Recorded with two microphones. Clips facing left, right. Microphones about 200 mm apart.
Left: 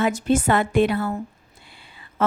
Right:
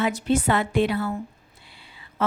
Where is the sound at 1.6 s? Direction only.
50° left (ahead or behind).